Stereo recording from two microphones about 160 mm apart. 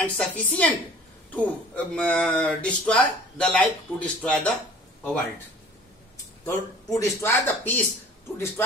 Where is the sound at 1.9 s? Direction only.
5° left (ahead or behind).